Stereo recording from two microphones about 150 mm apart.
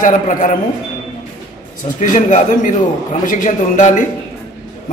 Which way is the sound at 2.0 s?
60° left (ahead or behind).